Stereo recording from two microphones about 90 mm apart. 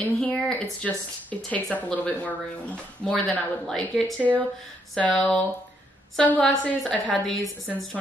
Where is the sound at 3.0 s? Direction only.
5° left (ahead or behind).